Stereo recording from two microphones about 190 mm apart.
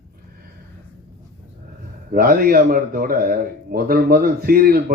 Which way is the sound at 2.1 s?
50° right (ahead or behind).